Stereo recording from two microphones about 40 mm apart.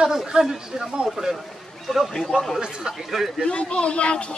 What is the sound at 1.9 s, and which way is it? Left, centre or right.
Speech, centre.